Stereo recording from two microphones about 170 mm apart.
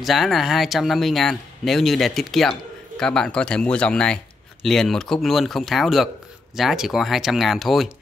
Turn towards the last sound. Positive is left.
turn(degrees=0)  # may be behind; listen again after turning